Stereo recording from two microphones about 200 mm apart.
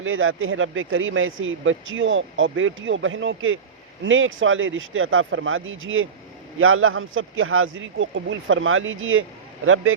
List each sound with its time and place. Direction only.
0.0 s speech: 85° right